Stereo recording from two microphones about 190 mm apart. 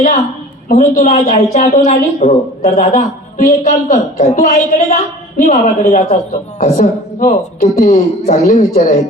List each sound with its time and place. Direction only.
0.7 s a woman's voice: 40° left (ahead or behind)